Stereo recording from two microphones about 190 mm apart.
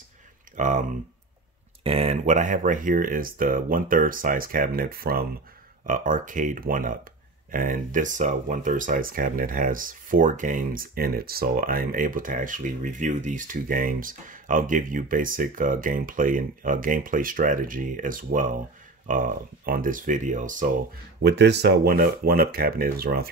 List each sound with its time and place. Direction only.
0.6 s speech: 40° right (ahead or behind)
21.2 s speech: 60° right (ahead or behind)